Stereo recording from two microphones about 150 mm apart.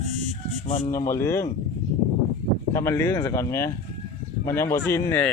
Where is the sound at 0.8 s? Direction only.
30° left (ahead or behind).